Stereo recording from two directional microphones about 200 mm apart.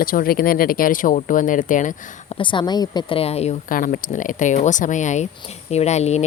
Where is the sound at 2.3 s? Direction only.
20° left (ahead or behind).